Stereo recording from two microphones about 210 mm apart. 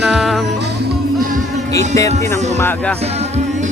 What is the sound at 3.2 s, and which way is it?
Music, 30° right (ahead or behind).